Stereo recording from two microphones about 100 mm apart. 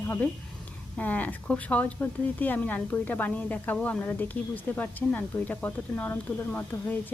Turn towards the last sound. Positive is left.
turn(degrees=15)  # may be behind; listen again after turning